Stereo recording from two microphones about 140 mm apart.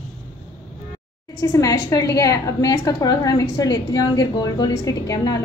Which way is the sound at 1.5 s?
25° left (ahead or behind).